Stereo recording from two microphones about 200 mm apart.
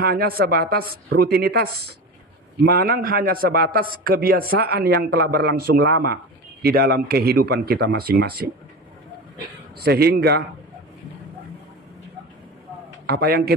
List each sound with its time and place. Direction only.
0.0 s a man's voice: 50° right (ahead or behind)
9.8 s a man's voice: 50° right (ahead or behind)
13.0 s a man's voice: 50° right (ahead or behind)